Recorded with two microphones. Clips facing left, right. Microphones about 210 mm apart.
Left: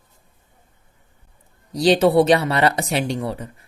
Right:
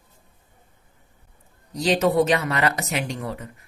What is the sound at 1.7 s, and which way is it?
Speech, 30° left (ahead or behind).